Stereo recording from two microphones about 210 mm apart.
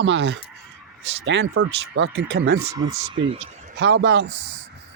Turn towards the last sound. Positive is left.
turn(degrees=-55)  # may be behind; listen again after turning